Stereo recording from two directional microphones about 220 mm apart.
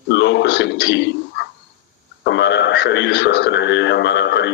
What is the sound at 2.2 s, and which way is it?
Radio, 55° left (ahead or behind).